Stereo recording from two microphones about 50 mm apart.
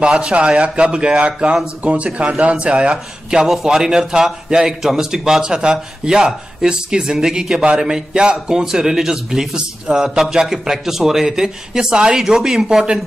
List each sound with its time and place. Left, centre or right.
0.0 s a man's voice: right